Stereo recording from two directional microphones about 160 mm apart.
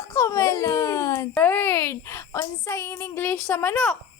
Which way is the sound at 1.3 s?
10° left (ahead or behind).